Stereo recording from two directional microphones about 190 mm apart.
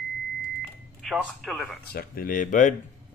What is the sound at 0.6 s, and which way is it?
Microwave oven, centre (ahead or behind).